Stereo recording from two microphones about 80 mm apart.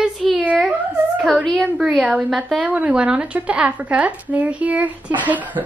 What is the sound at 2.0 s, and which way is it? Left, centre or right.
A woman's voice, centre.